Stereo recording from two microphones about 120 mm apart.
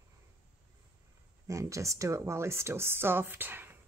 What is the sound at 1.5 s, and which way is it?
Speech, 25° right (ahead or behind).